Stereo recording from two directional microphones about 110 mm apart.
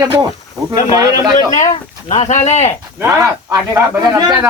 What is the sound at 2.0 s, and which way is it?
Speech, 85° left.